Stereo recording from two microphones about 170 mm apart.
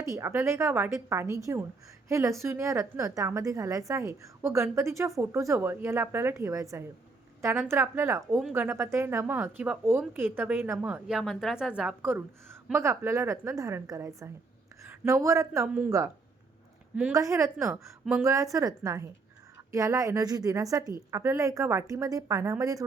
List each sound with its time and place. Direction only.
0.0 s a woman's voice: 15° right (ahead or behind)
17.2 s a woman's voice: 20° right (ahead or behind)
18.0 s a woman's voice: 5° right (ahead or behind)
18.3 s a woman's voice: 20° right (ahead or behind)